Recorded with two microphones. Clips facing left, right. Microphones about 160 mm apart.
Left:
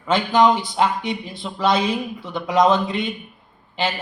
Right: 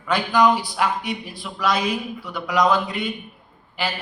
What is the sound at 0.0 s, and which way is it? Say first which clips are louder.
Speech: left 2 dB; 25° left (ahead or behind).